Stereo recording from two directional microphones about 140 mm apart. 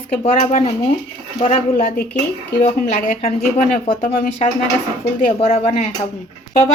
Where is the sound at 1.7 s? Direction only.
90° left.